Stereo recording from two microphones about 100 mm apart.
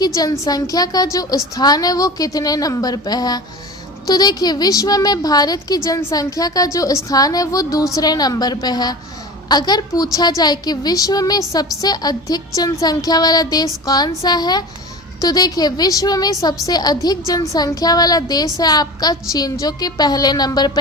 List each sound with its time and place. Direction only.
0.2 s a woman's voice: 40° left (ahead or behind)